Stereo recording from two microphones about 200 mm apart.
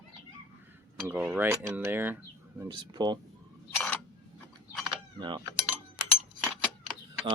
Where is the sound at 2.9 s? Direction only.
20° right (ahead or behind).